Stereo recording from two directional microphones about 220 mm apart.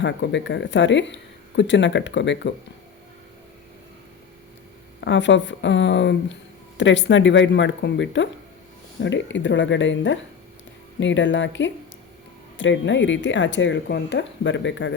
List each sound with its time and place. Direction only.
0.0 s speech: 55° left (ahead or behind)
4.9 s speech: 55° left (ahead or behind)